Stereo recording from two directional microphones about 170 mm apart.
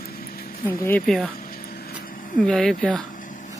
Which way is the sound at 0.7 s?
10° left (ahead or behind).